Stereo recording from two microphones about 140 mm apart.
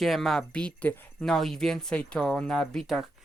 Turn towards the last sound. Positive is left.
turn(degrees=0)  # may be behind; listen again after turning